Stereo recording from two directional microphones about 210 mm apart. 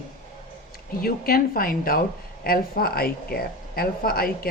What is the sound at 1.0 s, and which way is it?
Speech, 45° left (ahead or behind).